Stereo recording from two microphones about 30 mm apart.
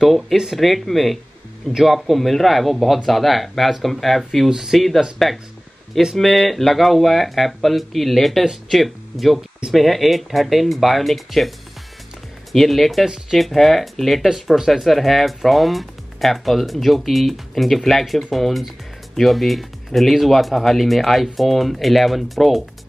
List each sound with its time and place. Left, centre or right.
0.0 s speech: centre
6.1 s speech: centre
12.5 s speech: centre
14.3 s speech: centre
14.7 s speech: centre